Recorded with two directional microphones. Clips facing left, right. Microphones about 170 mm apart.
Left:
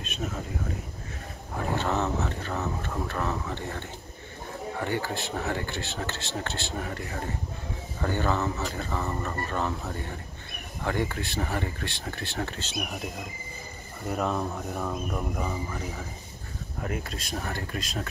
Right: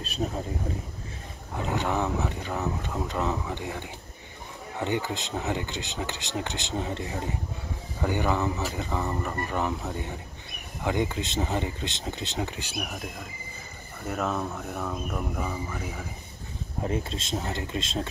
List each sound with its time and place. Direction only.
0.0 s speech: 35° right (ahead or behind)
1.6 s speech: 15° right (ahead or behind)
12.8 s speech: centre (ahead or behind)
16.8 s speech: 25° right (ahead or behind)